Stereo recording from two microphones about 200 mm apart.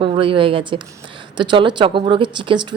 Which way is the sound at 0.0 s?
25° right (ahead or behind).